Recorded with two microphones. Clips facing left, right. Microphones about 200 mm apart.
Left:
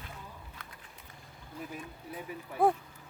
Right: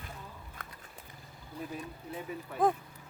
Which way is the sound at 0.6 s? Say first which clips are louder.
Right 2 dB; 50° right (ahead or behind).